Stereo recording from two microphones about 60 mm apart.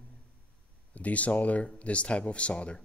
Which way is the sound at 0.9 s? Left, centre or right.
Left.